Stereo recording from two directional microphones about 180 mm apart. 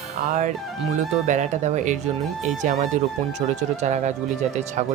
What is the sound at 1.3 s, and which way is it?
Speech, 40° right (ahead or behind).